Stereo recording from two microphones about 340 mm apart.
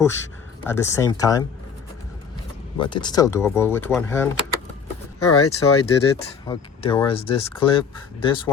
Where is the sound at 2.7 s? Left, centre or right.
Centre.